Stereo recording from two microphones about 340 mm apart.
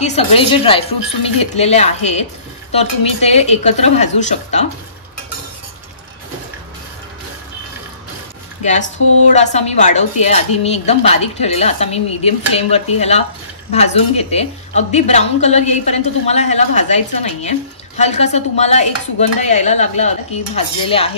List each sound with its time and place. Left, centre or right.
0.0 s a woman's voice: centre
9.3 s a woman's voice: centre